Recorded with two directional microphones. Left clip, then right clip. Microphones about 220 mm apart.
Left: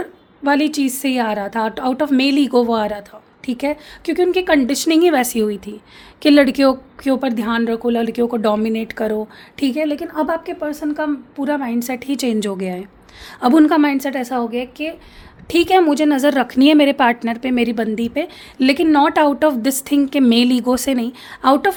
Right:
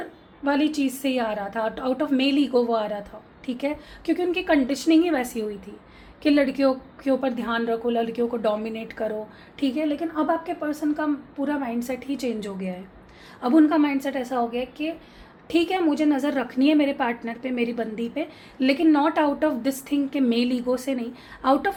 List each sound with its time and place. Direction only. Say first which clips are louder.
0.4 s a woman's voice: left 6 dB; 55° left (ahead or behind)